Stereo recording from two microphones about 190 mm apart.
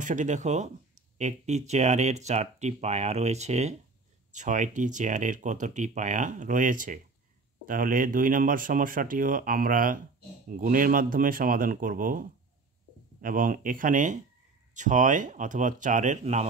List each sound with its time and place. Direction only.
0.0 s speech: 40° right (ahead or behind)